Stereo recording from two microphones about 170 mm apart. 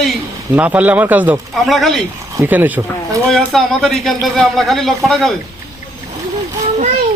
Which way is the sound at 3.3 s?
5° left (ahead or behind).